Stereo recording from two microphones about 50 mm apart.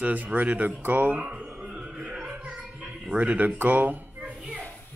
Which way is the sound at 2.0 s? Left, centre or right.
Right.